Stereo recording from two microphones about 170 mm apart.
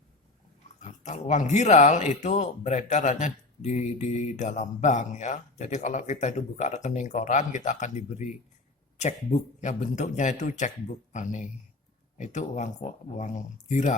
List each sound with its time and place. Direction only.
0.8 s speech: 45° left (ahead or behind)